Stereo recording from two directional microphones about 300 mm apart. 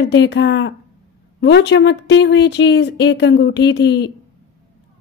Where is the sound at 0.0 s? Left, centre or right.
Left.